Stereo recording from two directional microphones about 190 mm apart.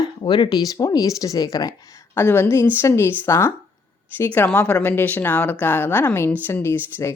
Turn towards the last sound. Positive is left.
turn(degrees=15)  # may be behind; listen again after turning